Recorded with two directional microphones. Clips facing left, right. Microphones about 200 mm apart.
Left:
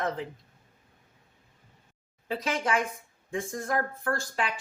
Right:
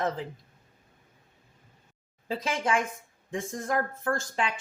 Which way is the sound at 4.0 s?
20° right (ahead or behind).